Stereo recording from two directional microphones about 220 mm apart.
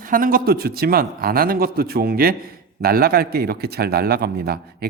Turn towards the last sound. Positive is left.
turn(degrees=-45)  # may be behind; listen again after turning